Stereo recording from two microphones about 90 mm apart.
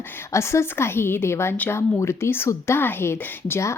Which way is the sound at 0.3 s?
30° left (ahead or behind).